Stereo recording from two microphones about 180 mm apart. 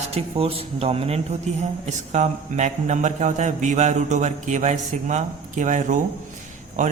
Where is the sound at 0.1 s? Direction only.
35° right (ahead or behind).